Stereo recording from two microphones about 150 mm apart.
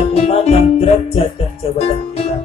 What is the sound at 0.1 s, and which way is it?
Music, 40° left (ahead or behind).